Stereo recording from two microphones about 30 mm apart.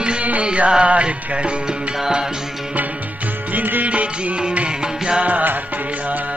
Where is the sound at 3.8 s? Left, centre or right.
Right.